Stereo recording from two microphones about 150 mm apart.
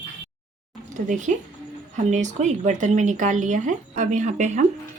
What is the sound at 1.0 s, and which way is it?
Speech, 55° right (ahead or behind).